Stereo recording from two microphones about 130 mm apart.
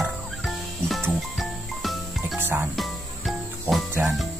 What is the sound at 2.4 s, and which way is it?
Music, 15° right (ahead or behind).